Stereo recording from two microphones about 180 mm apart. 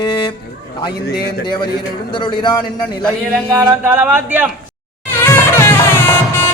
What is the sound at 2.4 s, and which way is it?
Speech, 25° left (ahead or behind).